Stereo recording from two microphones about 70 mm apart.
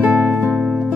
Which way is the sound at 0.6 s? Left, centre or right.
Centre.